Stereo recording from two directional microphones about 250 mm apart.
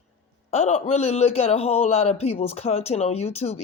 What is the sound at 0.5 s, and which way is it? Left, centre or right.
A man's voice, left.